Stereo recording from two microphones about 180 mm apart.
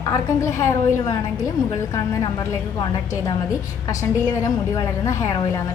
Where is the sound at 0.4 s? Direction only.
15° left (ahead or behind).